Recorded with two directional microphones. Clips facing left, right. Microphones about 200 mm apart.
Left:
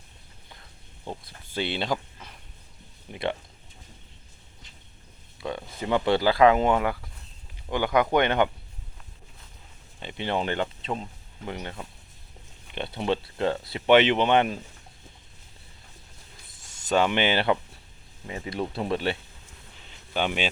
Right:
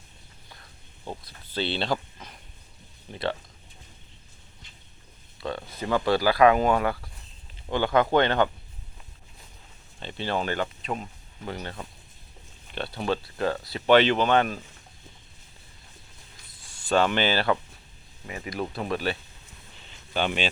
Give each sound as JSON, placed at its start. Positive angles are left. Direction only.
{"t": 1.5, "sound": "speech", "side_deg": 15}
{"t": 3.1, "sound": "speech", "side_deg": 20}
{"t": 5.4, "sound": "speech", "side_deg": 15}
{"t": 10.0, "sound": "speech", "side_deg": 15}
{"t": 12.7, "sound": "speech", "side_deg": 20}
{"t": 16.6, "sound": "a sound", "side_deg": 45}
{"t": 16.9, "sound": "speech", "side_deg": 15}
{"t": 20.1, "sound": "speech", "side_deg": 10}